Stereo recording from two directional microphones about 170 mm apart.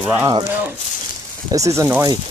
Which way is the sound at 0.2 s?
30° right (ahead or behind).